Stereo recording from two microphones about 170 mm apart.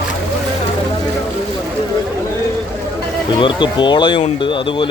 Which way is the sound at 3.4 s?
25° left (ahead or behind).